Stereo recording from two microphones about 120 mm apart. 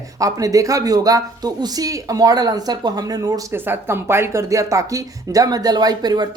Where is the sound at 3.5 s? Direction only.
20° right (ahead or behind).